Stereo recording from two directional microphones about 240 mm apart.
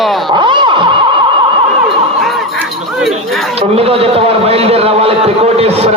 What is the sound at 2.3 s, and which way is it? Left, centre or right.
Honk, centre.